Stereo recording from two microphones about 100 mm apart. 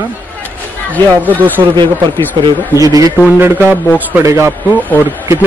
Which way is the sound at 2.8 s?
35° right (ahead or behind).